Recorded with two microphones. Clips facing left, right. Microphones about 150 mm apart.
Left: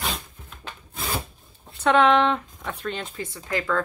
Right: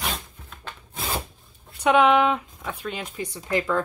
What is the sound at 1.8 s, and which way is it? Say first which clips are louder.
Speech: even; 10° right (ahead or behind).